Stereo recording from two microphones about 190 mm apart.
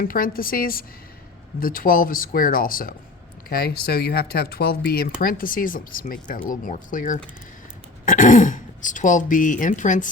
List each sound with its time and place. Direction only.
0.0 s speech: 50° left (ahead or behind)